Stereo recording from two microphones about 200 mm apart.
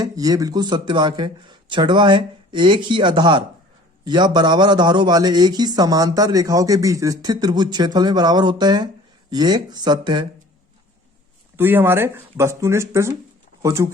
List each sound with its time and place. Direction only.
0.0 s a man's voice: 20° right (ahead or behind)
11.5 s speech: 10° right (ahead or behind)